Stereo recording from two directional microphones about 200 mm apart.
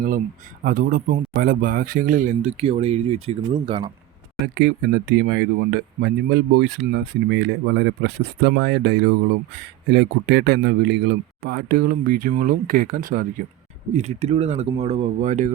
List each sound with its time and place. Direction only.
0.6 s a man's voice: 45° right (ahead or behind); by 3.9 s 25° right (ahead or behind)
4.5 s a man's voice: 60° right (ahead or behind)
13.9 s speech: 35° right (ahead or behind)